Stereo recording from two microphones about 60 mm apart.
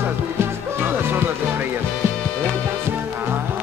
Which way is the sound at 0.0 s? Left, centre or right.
Right.